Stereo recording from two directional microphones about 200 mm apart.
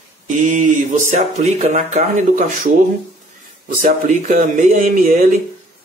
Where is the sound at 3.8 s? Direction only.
40° right (ahead or behind).